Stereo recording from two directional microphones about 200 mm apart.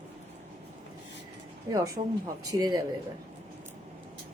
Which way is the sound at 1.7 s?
15° right (ahead or behind).